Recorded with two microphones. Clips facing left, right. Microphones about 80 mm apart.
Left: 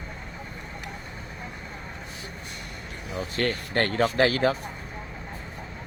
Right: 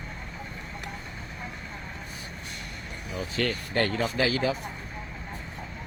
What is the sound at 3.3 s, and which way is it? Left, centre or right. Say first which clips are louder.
Speech: left 2 dB; left.